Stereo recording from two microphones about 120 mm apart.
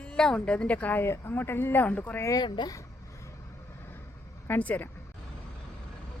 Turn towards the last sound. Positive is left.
turn(degrees=15)  # may be behind; listen again after turning